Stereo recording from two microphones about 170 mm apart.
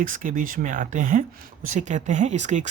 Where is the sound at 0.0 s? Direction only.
50° right (ahead or behind).